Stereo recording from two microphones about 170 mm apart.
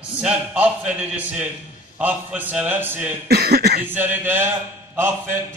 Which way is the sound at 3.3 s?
70° right (ahead or behind).